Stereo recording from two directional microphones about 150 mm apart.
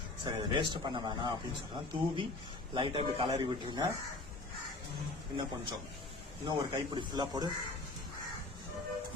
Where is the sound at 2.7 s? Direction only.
35° right (ahead or behind).